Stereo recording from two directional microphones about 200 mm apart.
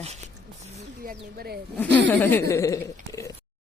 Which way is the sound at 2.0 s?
10° left (ahead or behind).